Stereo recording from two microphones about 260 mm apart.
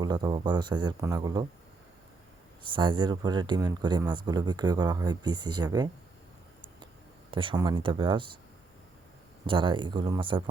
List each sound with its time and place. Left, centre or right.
0.0 s speech: centre
2.7 s speech: centre
7.3 s speech: centre
9.5 s speech: centre